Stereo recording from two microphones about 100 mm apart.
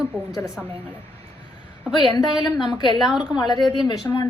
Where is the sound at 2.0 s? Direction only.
50° left (ahead or behind).